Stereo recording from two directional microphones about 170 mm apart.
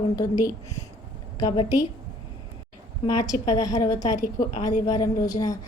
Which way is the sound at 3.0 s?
20° left (ahead or behind).